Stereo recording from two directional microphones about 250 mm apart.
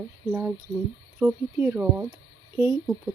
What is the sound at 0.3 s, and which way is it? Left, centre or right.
Speech, centre.